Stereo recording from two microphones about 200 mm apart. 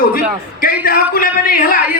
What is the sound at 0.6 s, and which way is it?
A man's voice, 45° left (ahead or behind).